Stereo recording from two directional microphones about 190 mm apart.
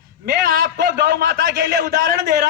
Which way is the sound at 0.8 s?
60° right (ahead or behind).